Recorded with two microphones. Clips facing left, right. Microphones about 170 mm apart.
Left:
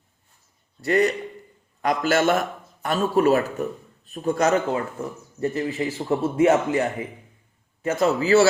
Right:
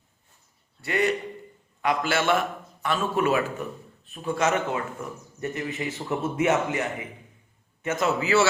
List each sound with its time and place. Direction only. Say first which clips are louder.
0.8 s a man's voice: left 5 dB; 40° left (ahead or behind)